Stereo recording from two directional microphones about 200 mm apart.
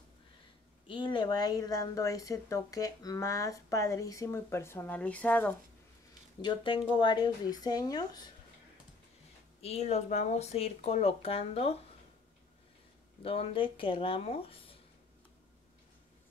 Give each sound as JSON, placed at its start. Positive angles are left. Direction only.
{"t": 0.8, "sound": "a woman's voice", "side_deg": 25}
{"t": 6.4, "sound": "speech", "side_deg": 25}
{"t": 9.6, "sound": "speech", "side_deg": 30}
{"t": 13.2, "sound": "speech", "side_deg": 30}